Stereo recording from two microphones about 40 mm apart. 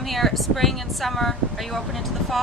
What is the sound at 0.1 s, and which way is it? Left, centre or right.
Speech, centre.